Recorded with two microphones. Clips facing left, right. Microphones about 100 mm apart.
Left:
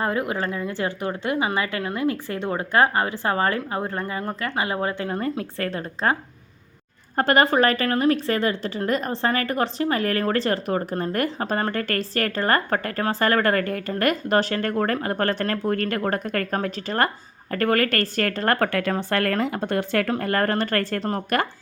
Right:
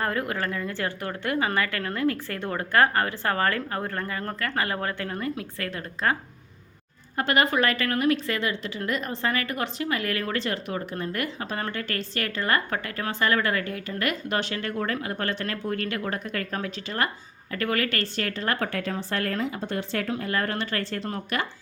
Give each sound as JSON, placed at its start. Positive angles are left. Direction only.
{"t": 0.0, "sound": "speech", "side_deg": 20}
{"t": 5.2, "sound": "a woman's voice", "side_deg": 35}
{"t": 7.2, "sound": "a woman's voice", "side_deg": 40}